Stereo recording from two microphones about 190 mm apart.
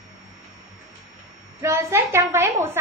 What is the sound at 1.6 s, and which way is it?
A woman's voice, 15° right (ahead or behind).